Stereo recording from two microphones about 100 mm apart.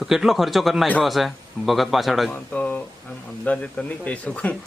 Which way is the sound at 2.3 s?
10° left (ahead or behind).